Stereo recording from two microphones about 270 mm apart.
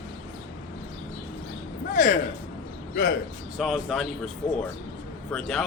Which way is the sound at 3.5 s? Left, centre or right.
Centre.